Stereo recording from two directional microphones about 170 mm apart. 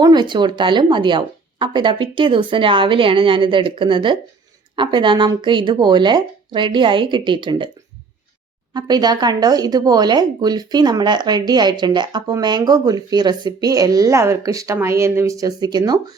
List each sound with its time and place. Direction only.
0.0 s speech: 25° right (ahead or behind)
8.7 s speech: 25° right (ahead or behind)